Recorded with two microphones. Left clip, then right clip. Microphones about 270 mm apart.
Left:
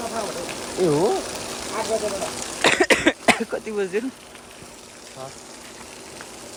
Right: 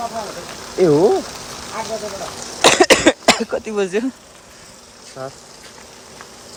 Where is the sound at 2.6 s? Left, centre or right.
Centre.